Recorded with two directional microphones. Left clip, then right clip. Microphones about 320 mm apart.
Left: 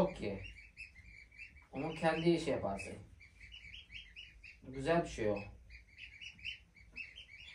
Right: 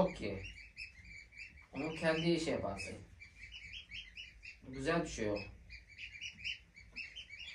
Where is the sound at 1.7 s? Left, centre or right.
Centre.